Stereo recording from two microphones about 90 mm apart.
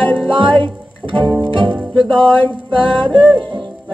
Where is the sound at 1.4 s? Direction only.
60° right (ahead or behind).